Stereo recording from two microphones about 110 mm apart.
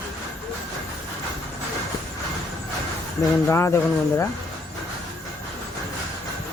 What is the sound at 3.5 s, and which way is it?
Speech, 25° left (ahead or behind).